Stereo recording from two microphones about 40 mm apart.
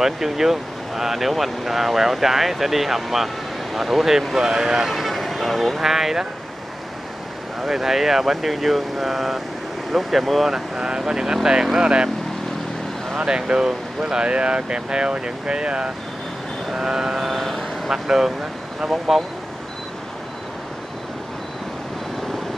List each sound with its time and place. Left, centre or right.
0.0 s speech: centre
4.8 s speech: centre
7.6 s speech: centre
10.5 s speech: centre
13.2 s speech: right
17.3 s vehicle: centre
17.8 s speech: centre